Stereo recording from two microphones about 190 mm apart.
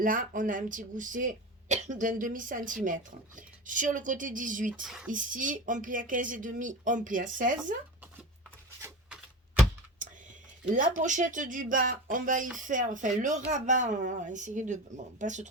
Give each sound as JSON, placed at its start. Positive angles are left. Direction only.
{"t": 0.0, "sound": "speech", "side_deg": -45}
{"t": 4.8, "sound": "speech", "side_deg": -5}
{"t": 5.1, "sound": "speech", "side_deg": -45}
{"t": 10.7, "sound": "speech", "side_deg": -40}